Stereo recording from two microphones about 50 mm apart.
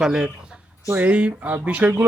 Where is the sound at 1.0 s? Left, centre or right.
Right.